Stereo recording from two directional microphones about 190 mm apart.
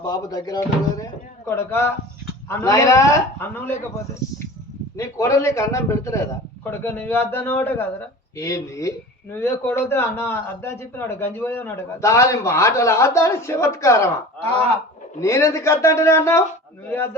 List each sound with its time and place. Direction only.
0.0 s a man's voice: 20° left (ahead or behind)
4.9 s a man's voice: 15° left (ahead or behind)
15.2 s a man's voice: 15° left (ahead or behind)